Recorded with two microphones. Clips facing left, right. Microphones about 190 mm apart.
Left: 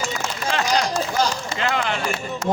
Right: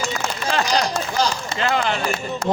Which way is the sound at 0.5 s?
35° right (ahead or behind).